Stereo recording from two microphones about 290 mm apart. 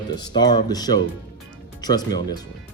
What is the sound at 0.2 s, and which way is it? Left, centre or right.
Speech, centre.